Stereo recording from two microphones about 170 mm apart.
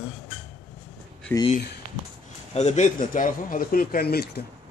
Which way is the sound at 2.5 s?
45° left (ahead or behind).